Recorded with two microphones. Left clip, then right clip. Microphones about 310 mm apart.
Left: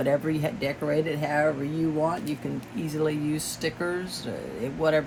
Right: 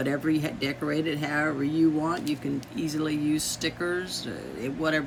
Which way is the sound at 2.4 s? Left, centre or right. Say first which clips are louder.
Right 2 dB; centre.